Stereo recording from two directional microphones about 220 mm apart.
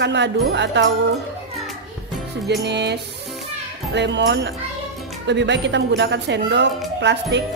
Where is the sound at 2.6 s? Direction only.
50° right (ahead or behind).